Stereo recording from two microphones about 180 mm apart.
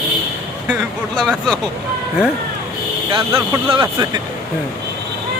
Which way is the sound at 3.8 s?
20° right (ahead or behind).